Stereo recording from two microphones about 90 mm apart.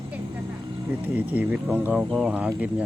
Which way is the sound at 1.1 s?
15° right (ahead or behind).